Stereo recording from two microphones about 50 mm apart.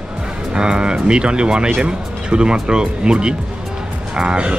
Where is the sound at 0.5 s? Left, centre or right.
Centre.